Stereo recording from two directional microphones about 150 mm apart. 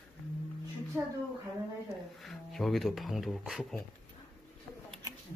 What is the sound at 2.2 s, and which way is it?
Speech, centre (ahead or behind).